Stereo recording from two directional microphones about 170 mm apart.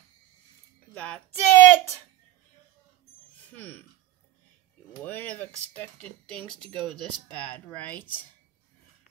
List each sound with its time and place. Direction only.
0.9 s a sound: 5° left (ahead or behind)
3.3 s speech: 10° left (ahead or behind)
5.0 s speech: 10° left (ahead or behind)